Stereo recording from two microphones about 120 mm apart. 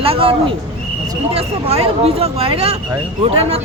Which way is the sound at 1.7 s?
55° right (ahead or behind).